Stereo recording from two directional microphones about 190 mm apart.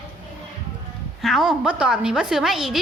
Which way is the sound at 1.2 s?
Centre (ahead or behind).